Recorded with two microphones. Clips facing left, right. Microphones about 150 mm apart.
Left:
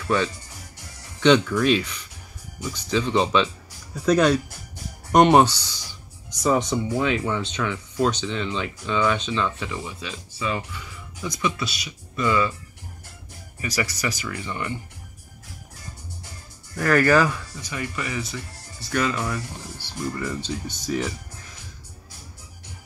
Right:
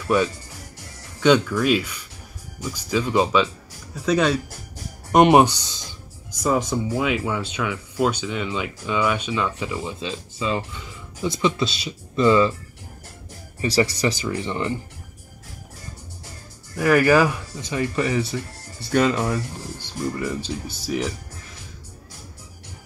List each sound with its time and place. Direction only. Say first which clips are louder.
1.2 s speech: even; 5° right (ahead or behind)
6.4 s speech: even; 5° right (ahead or behind); by 12.5 s 30° right (ahead or behind)
13.6 s speech: right 7 dB; 30° right (ahead or behind)
16.7 s speech: right 2 dB; 10° right (ahead or behind); by 19.4 s 30° right (ahead or behind)
19.8 s speech: right 2 dB; 15° right (ahead or behind)